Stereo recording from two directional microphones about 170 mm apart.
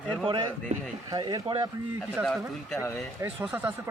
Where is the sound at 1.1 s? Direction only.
20° right (ahead or behind).